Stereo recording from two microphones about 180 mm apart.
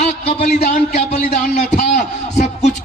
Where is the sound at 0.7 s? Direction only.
40° left (ahead or behind).